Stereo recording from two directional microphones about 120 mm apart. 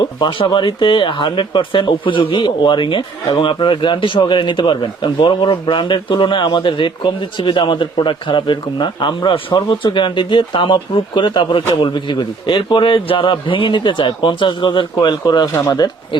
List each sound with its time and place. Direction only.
0.2 s a man's voice: 45° left (ahead or behind)